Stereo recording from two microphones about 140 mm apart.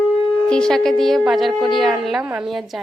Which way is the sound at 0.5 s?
5° left (ahead or behind).